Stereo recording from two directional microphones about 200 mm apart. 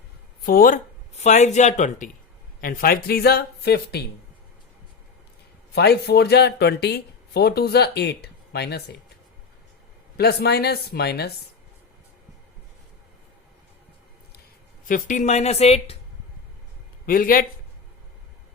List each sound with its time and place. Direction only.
0.4 s speech: 45° left (ahead or behind)
5.7 s speech: 55° left (ahead or behind)
10.2 s speech: 55° left (ahead or behind)
14.8 s speech: 40° left (ahead or behind)
17.1 s speech: 45° left (ahead or behind)